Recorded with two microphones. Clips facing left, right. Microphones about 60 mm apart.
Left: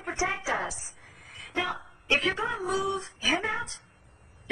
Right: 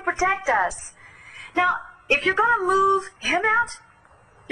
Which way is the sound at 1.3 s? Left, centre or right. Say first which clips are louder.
Right 10 dB; right.